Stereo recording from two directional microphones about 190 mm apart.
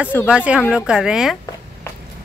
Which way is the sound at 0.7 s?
5° right (ahead or behind).